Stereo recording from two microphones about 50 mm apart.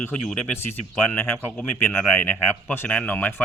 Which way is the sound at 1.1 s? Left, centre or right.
Left.